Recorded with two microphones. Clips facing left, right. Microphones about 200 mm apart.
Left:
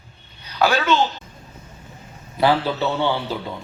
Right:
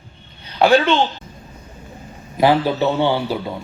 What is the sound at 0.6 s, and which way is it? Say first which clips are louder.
Speech: right 5 dB; 30° right (ahead or behind).